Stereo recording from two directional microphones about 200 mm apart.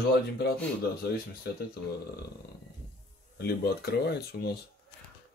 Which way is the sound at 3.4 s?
55° left (ahead or behind).